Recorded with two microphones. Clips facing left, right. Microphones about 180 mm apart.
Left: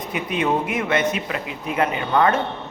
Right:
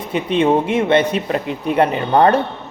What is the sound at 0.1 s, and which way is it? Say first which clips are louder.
Speech: right 7 dB; 30° right (ahead or behind).